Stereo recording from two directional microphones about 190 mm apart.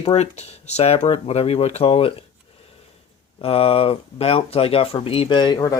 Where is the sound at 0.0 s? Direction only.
35° left (ahead or behind).